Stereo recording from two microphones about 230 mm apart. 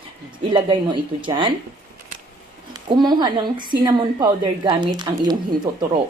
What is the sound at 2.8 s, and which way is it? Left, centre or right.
A woman's voice, centre.